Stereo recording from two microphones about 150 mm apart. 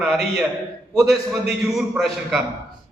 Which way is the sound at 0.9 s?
Centre (ahead or behind).